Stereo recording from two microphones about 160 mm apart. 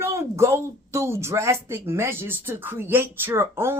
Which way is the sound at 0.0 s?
15° right (ahead or behind).